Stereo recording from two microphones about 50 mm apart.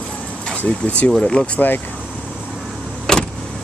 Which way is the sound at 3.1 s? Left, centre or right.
Centre.